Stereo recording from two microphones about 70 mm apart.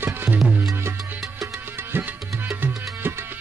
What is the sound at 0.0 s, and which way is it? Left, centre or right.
Music, right.